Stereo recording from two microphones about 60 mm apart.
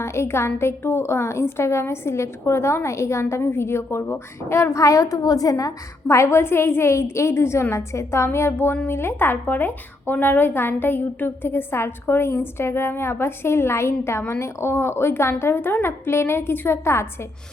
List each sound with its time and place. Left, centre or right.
0.0 s a woman's voice: left
4.8 s a woman's voice: left